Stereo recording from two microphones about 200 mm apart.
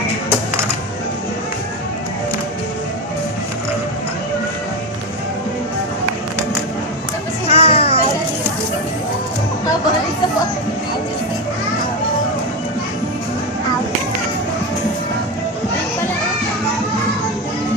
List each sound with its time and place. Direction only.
7.4 s music: 30° left (ahead or behind)